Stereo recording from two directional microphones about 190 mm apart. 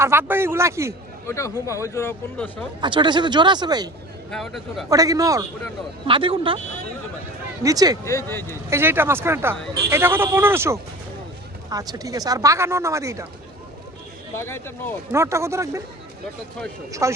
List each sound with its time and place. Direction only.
0.0 s speech: 10° right (ahead or behind)
1.3 s speech: 15° left (ahead or behind)
2.8 s speech: 25° right (ahead or behind)
4.3 s speech: centre (ahead or behind)
4.9 s speech: 20° right (ahead or behind)
7.6 s speech: 20° right (ahead or behind)
8.0 s speech: 15° left (ahead or behind)
8.4 s speech: 15° right (ahead or behind)
14.3 s speech: 15° left (ahead or behind)
15.1 s speech: 15° right (ahead or behind)
17.0 s speech: 15° right (ahead or behind)